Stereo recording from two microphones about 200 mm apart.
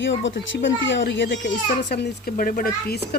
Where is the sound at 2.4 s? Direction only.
45° left (ahead or behind).